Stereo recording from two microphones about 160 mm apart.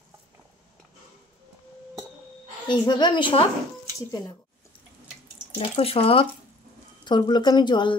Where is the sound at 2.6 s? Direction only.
30° left (ahead or behind).